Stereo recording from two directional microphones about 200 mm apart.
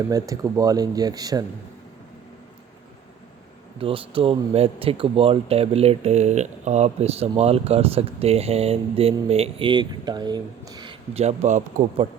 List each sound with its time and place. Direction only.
0.1 s speech: 15° right (ahead or behind)
3.8 s speech: 25° right (ahead or behind)